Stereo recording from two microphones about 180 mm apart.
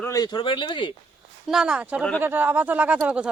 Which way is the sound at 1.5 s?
5° right (ahead or behind).